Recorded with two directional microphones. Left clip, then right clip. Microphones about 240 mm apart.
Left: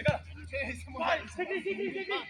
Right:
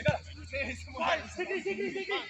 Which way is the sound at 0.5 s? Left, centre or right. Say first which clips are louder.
Even; centre.